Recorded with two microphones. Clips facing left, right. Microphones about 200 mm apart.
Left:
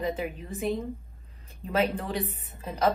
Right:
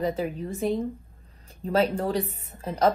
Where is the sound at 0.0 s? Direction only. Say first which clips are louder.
Right 4 dB; 35° right (ahead or behind).